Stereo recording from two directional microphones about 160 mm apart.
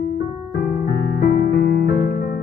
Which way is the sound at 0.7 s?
70° left (ahead or behind).